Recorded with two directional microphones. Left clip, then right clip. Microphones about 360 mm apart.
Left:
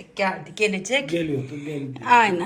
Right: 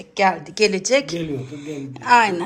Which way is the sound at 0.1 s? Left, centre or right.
Centre.